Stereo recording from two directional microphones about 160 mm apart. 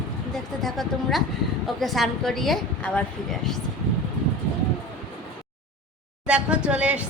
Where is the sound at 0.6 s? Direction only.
Centre (ahead or behind).